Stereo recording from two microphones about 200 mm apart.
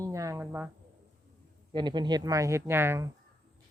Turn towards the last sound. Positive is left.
turn(degrees=-15)  # may be behind; listen again after turning